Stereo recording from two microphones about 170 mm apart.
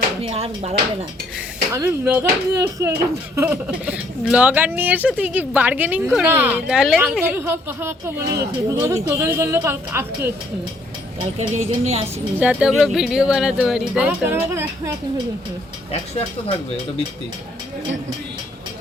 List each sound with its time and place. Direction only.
0.2 s speech: 35° right (ahead or behind)
1.7 s a woman's voice: 15° right (ahead or behind)
11.2 s speech: 40° right (ahead or behind)
12.4 s speech: 5° right (ahead or behind)